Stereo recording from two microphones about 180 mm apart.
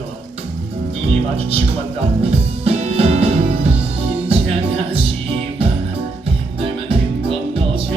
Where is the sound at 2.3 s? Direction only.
35° right (ahead or behind).